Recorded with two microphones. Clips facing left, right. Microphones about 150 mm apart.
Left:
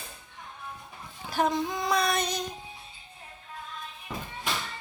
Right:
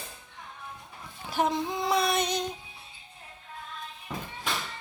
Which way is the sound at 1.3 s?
25° right (ahead or behind).